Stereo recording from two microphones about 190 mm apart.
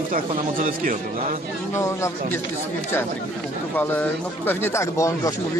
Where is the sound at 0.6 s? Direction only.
45° right (ahead or behind).